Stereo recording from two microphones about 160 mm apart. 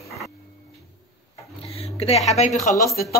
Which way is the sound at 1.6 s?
40° left (ahead or behind).